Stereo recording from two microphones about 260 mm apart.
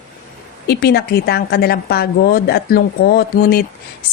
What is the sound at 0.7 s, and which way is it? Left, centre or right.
A woman's voice, left.